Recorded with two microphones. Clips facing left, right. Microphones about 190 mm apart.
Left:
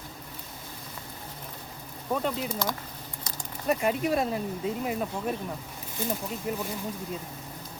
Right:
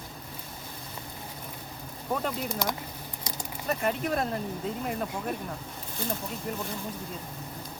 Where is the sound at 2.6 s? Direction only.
15° right (ahead or behind).